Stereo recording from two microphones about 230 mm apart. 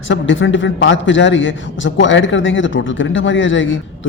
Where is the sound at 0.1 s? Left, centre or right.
Left.